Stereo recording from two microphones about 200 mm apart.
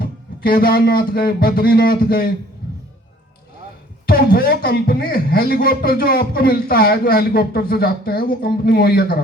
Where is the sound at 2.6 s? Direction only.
50° left (ahead or behind).